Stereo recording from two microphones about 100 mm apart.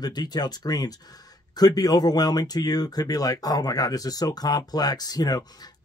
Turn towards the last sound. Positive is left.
turn(degrees=40)  # may be behind; listen again after turning